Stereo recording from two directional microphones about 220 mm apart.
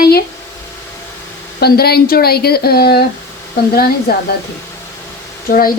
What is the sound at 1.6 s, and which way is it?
Speech, 45° left (ahead or behind).